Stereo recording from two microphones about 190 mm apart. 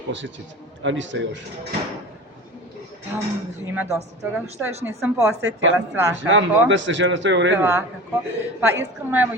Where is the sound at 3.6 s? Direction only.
10° right (ahead or behind).